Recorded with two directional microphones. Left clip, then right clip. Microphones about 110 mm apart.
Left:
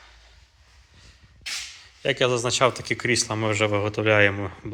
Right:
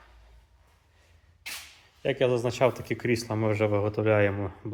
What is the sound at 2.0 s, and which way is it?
Speech, 15° right (ahead or behind).